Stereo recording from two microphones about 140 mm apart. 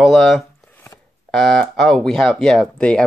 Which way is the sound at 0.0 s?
Centre (ahead or behind).